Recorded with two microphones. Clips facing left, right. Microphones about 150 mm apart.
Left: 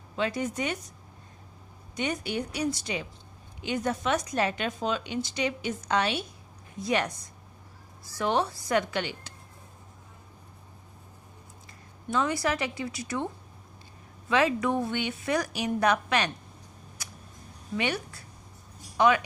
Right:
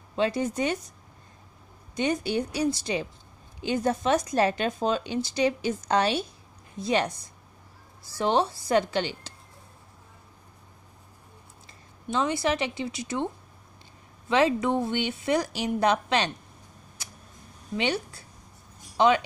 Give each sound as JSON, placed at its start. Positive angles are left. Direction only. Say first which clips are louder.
{"t": 0.1, "sound": "a woman's voice", "louder": "right 4 dB", "side_deg": -30}
{"t": 2.0, "sound": "a woman's voice", "louder": "right 4 dB", "side_deg": -30}
{"t": 12.1, "sound": "a woman's voice", "louder": "right 2 dB", "side_deg": -25}
{"t": 14.3, "sound": "a woman's voice", "louder": "right 2 dB", "side_deg": -25}
{"t": 17.7, "sound": "a woman's voice", "louder": "right 2 dB", "side_deg": -25}